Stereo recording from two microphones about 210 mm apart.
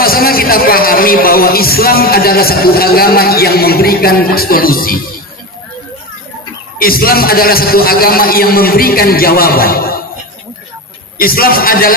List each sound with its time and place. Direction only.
0.0 s a man's voice: 45° left (ahead or behind)
6.7 s a man's voice: 45° left (ahead or behind)
11.2 s a man's voice: 45° left (ahead or behind)